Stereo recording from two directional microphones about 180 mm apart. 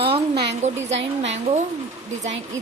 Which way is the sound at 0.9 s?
90° right.